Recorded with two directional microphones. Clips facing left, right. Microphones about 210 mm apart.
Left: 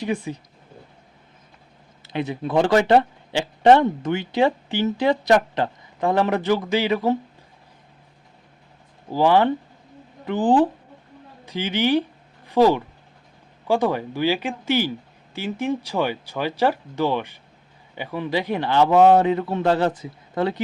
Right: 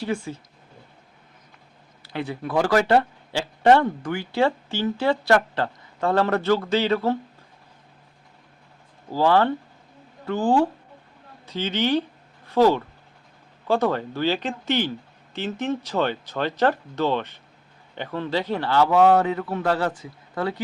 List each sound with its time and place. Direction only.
0.0 s speech: 15° left (ahead or behind)
2.0 s speech: 20° left (ahead or behind)
9.1 s a man's voice: 15° left (ahead or behind)